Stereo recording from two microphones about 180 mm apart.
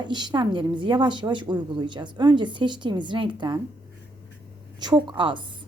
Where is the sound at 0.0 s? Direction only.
25° right (ahead or behind).